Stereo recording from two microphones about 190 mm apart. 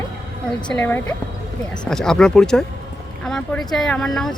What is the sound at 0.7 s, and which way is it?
Speech, 10° left (ahead or behind).